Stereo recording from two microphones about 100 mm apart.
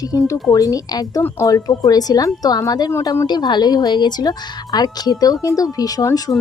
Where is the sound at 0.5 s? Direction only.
35° left (ahead or behind).